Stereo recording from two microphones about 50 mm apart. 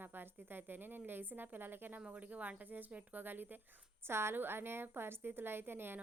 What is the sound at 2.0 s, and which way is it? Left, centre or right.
Speech, right.